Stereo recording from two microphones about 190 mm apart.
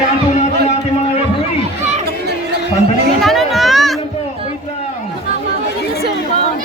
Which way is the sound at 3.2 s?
Centre (ahead or behind).